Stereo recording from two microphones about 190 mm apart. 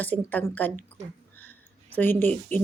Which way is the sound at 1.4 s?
10° left (ahead or behind).